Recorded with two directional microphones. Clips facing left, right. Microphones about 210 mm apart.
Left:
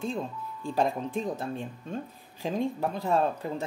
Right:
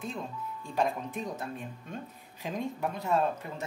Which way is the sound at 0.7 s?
30° left (ahead or behind).